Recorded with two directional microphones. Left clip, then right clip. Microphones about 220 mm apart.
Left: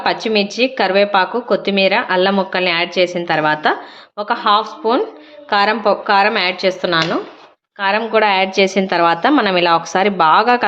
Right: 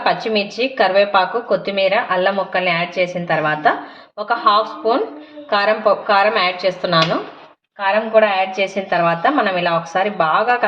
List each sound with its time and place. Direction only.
0.0 s a woman's voice: 30° left (ahead or behind)
7.8 s a woman's voice: 50° left (ahead or behind)